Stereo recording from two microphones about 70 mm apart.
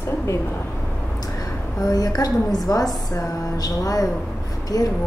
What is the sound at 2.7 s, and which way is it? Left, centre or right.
Speech, left.